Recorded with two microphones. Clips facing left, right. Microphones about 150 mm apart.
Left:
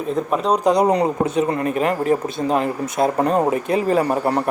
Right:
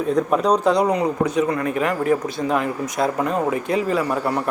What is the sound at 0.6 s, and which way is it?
Speech, 15° left (ahead or behind).